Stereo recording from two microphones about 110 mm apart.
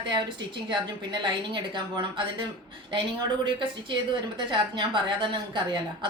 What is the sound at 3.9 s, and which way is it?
A woman's voice, 45° right (ahead or behind).